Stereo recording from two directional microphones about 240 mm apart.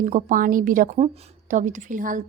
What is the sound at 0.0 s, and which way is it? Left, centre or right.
A woman's voice, right.